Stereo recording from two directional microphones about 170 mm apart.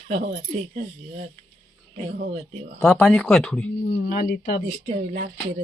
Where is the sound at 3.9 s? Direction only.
55° left (ahead or behind).